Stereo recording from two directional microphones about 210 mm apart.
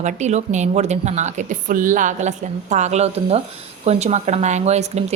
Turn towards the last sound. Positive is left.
turn(degrees=-30)  # may be behind; listen again after turning